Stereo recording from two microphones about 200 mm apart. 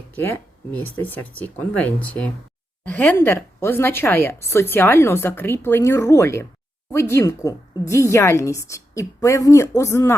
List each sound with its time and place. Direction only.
0.7 s a woman's voice: 10° left (ahead or behind)